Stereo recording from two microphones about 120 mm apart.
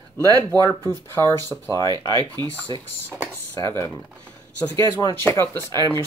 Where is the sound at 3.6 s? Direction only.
25° left (ahead or behind).